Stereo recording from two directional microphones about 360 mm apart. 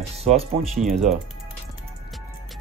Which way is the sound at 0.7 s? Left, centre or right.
Centre.